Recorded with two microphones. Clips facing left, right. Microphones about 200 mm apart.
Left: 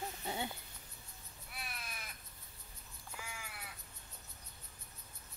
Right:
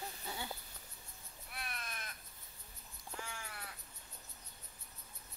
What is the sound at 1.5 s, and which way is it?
Crow, centre (ahead or behind).